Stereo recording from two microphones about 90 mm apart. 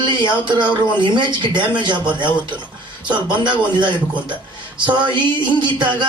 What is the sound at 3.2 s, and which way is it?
Speech, 60° right (ahead or behind).